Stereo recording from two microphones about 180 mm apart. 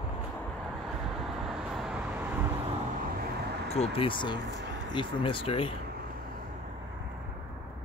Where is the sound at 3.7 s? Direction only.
35° left (ahead or behind).